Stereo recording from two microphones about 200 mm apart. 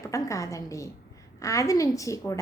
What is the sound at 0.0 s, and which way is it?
A woman's voice, 15° left (ahead or behind).